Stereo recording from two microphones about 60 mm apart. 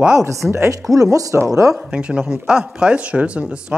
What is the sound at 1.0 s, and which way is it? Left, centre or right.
Speech, right.